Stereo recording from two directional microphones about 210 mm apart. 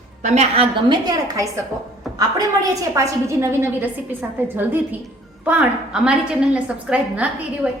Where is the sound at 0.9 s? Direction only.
20° right (ahead or behind).